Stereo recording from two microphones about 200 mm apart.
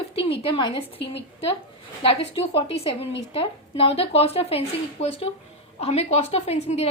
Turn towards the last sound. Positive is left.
turn(degrees=30)  # may be behind; listen again after turning